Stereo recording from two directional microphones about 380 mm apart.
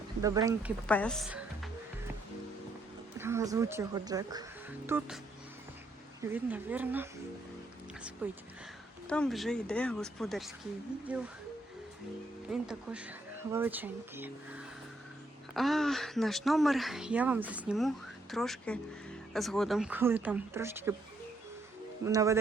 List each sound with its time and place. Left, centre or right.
0.2 s speech: centre
0.9 s speech: centre
3.2 s speech: centre
6.2 s speech: centre
8.2 s speech: centre
12.5 s speech: centre
22.0 s speech: centre